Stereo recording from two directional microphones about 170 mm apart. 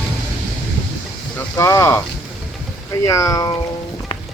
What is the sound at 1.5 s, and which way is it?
Speech, 15° left (ahead or behind).